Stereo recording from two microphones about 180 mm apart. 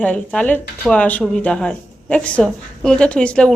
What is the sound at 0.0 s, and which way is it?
Speech, 10° left (ahead or behind).